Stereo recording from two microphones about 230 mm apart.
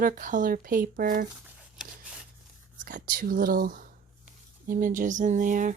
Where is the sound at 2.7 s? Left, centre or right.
Right.